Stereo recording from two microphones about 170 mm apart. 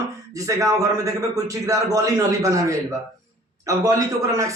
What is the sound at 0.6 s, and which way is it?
A man's voice, 20° right (ahead or behind).